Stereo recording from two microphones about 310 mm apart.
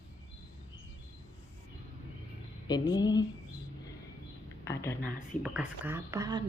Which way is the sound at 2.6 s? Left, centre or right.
Centre.